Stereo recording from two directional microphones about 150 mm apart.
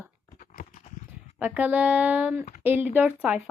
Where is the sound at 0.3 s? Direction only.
65° left (ahead or behind).